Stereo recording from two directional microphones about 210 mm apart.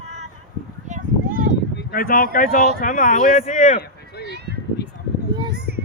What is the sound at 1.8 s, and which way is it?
Speech, 45° left (ahead or behind).